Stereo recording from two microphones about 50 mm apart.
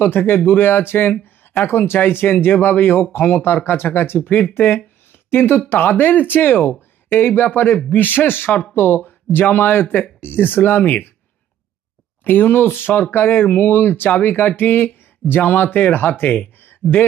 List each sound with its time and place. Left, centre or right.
0.0 s speech: left
12.2 s speech: left